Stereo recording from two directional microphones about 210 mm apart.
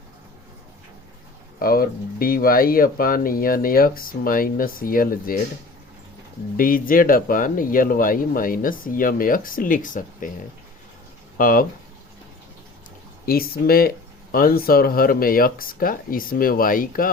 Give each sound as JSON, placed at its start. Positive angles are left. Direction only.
{"t": 1.5, "sound": "speech", "side_deg": 45}
{"t": 6.6, "sound": "speech", "side_deg": 45}
{"t": 11.3, "sound": "speech", "side_deg": 40}
{"t": 13.2, "sound": "speech", "side_deg": 45}